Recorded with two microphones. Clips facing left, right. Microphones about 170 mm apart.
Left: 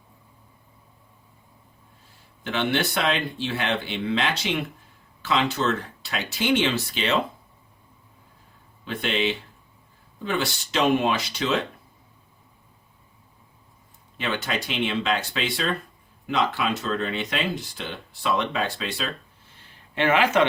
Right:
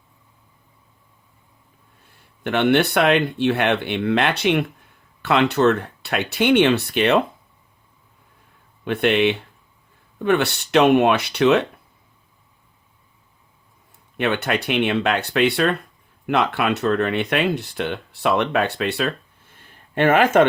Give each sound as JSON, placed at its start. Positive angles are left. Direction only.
{"t": 2.4, "sound": "speech", "side_deg": -60}
{"t": 8.8, "sound": "speech", "side_deg": -60}
{"t": 14.2, "sound": "speech", "side_deg": -65}
{"t": 19.5, "sound": "a sound", "side_deg": -50}